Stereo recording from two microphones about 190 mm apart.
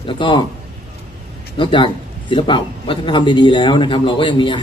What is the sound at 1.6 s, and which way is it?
Speech, 25° left (ahead or behind).